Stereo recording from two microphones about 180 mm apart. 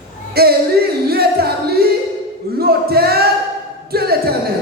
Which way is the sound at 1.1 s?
60° right (ahead or behind).